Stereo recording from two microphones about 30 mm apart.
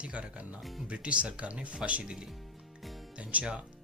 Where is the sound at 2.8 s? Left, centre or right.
Centre.